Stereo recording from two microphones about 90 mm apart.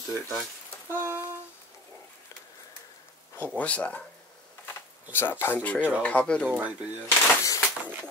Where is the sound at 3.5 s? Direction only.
15° left (ahead or behind).